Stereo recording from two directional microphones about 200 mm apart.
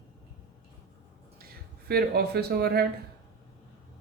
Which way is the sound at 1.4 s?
50° right (ahead or behind).